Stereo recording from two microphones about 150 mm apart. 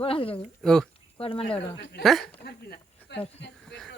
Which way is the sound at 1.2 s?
40° left (ahead or behind).